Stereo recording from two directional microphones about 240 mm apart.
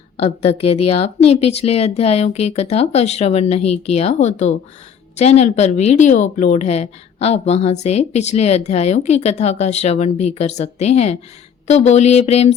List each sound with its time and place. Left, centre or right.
0.2 s a woman's voice: left